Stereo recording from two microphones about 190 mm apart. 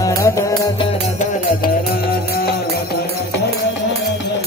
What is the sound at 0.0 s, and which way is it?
Music, 15° left (ahead or behind).